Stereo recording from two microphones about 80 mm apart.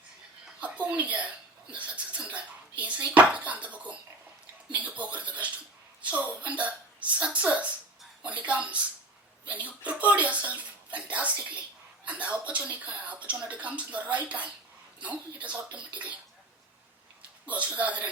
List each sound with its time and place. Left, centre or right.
0.6 s a woman's voice: centre
17.4 s speech: centre